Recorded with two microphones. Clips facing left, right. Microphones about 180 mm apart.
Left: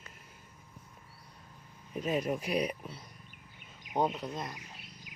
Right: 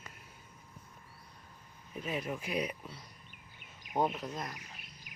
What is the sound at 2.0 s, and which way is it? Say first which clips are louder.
Speech: left 6 dB; 40° left (ahead or behind).